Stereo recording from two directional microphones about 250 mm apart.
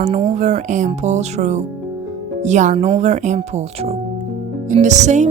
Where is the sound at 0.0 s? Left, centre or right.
Right.